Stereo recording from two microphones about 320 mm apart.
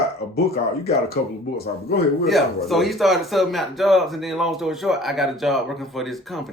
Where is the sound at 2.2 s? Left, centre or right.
Centre.